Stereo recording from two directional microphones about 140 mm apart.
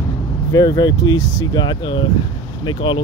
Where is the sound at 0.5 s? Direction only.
30° left (ahead or behind).